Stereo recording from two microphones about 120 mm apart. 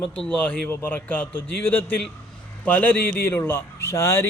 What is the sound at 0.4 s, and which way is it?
Speech, 15° left (ahead or behind).